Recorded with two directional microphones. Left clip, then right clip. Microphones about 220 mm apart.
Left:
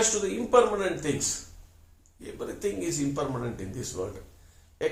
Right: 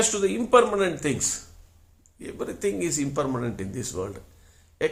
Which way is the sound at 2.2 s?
40° right (ahead or behind).